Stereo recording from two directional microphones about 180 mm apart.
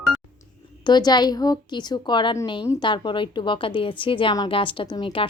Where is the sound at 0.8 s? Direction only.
25° left (ahead or behind).